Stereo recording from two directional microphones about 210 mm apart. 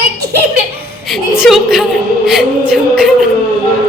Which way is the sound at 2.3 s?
Centre (ahead or behind).